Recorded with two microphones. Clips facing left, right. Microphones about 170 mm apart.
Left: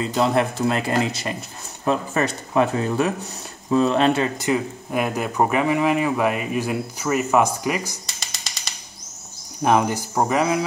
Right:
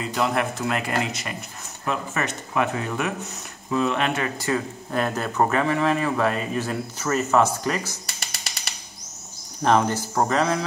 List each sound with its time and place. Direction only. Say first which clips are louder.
0.0 s speech: left 4 dB; 30° left (ahead or behind); by 8.0 s 15° left (ahead or behind)
9.6 s speech: left 1 dB; 10° left (ahead or behind)